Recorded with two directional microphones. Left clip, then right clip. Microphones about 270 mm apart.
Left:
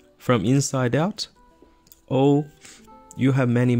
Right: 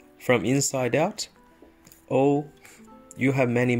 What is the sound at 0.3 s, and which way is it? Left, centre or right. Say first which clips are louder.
Speech: left 1 dB; left.